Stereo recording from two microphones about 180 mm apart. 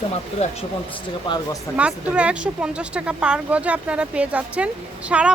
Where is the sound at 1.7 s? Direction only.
5° right (ahead or behind).